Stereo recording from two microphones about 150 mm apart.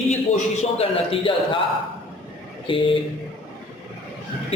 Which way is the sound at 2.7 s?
35° left (ahead or behind).